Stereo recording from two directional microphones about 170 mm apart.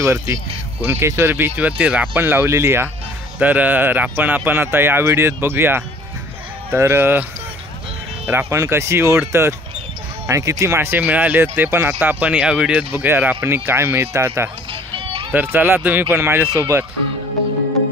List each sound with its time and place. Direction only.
0.0 s speech: 15° right (ahead or behind)
8.3 s speech: 15° right (ahead or behind)
14.7 s music: 30° right (ahead or behind)
15.3 s speech: 15° right (ahead or behind)